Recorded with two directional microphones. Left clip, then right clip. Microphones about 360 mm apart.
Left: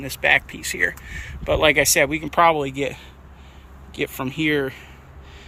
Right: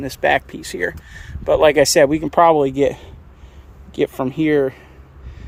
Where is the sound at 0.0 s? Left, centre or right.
Right.